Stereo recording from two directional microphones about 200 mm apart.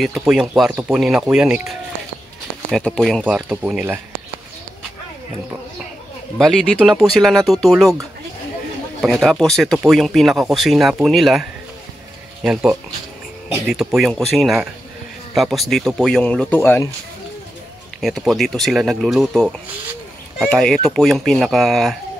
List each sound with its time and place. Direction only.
0.0 s speech: centre (ahead or behind)
6.3 s speech: centre (ahead or behind)
9.0 s speech: centre (ahead or behind)
13.7 s speech: centre (ahead or behind)
18.0 s speech: centre (ahead or behind)